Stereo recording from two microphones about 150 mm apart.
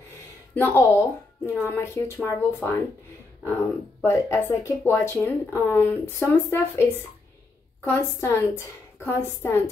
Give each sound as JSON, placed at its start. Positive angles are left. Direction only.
{"t": 0.6, "sound": "speech", "side_deg": 20}